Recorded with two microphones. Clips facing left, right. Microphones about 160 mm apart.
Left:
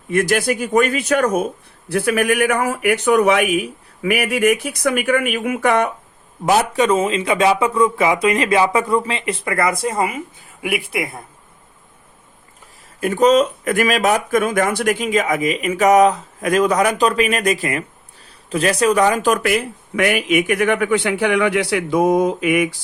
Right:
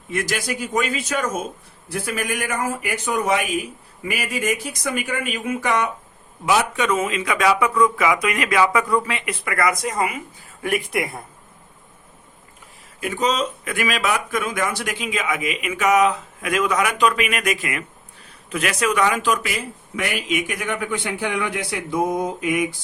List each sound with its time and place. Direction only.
0.1 s speech: 55° left (ahead or behind)
6.4 s speech: 40° left (ahead or behind)
10.6 s speech: 10° left (ahead or behind)
13.0 s speech: 50° left (ahead or behind)
19.3 s speech: 60° left (ahead or behind)